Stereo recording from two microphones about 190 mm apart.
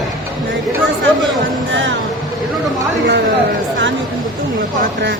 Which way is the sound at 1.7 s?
75° right (ahead or behind).